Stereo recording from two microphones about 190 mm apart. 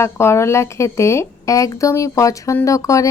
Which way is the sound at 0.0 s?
15° left (ahead or behind).